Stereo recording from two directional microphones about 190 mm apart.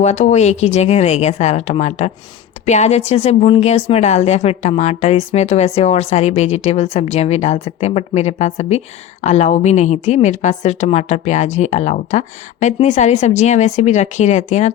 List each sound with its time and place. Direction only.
0.0 s a woman's voice: 35° left (ahead or behind)